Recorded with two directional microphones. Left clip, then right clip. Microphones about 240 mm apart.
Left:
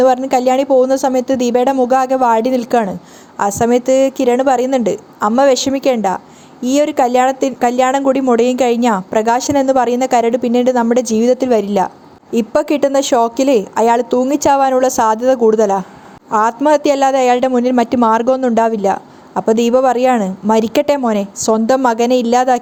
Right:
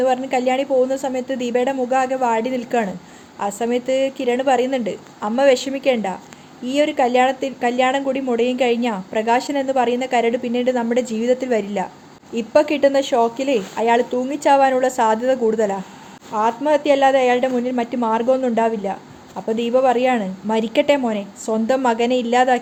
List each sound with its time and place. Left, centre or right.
0.0 s a woman's voice: left